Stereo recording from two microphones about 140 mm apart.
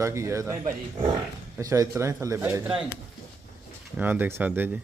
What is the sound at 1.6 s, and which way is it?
Speech, 25° right (ahead or behind).